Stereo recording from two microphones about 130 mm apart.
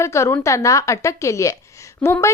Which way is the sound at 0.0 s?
20° left (ahead or behind).